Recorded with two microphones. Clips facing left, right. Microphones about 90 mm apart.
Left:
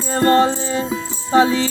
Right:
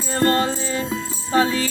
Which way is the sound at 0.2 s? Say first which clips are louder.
Left 5 dB; 25° left (ahead or behind).